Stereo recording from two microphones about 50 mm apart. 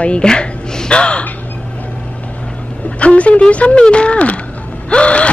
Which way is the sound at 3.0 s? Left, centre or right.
Left.